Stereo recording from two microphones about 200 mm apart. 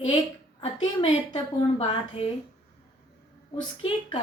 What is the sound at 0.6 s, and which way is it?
A woman's voice, 25° left (ahead or behind).